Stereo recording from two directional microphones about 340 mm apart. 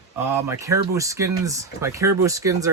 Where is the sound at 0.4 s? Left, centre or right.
Centre.